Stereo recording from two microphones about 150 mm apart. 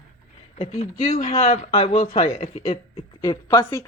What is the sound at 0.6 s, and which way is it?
Speech, 45° left (ahead or behind).